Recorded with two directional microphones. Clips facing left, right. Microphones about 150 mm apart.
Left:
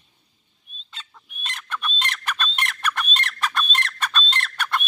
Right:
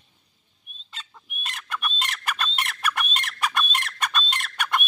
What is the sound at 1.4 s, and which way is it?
Chicken, 5° right (ahead or behind).